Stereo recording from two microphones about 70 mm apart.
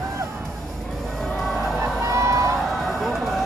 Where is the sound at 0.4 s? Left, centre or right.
Centre.